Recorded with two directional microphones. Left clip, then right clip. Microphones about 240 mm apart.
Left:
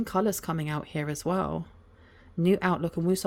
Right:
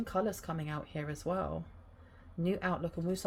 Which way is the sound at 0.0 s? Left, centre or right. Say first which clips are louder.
Left 7 dB; left.